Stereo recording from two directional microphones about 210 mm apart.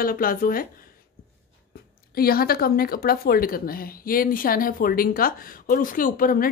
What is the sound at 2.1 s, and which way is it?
A woman's voice, 45° left (ahead or behind).